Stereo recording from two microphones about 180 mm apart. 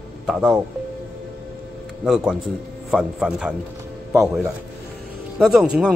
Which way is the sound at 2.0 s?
5° right (ahead or behind).